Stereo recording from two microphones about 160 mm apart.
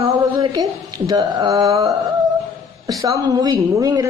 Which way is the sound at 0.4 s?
25° right (ahead or behind).